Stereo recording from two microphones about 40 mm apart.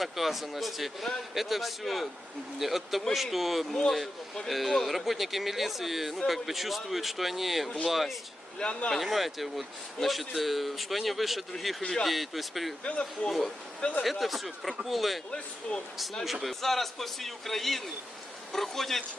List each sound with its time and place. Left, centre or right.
0.0 s a man's voice: centre
3.7 s a man's voice: centre
8.5 s speech: left
9.0 s a man's voice: centre
13.2 s a man's voice: left
14.0 s a man's voice: centre
16.2 s a man's voice: centre